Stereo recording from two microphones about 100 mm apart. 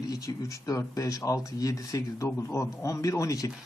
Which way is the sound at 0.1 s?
35° left (ahead or behind).